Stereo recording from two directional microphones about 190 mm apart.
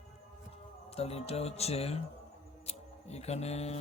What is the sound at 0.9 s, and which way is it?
Speech, 30° left (ahead or behind).